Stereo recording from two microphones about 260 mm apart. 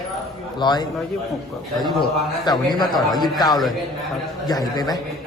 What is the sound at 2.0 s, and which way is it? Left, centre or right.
A man's voice, centre.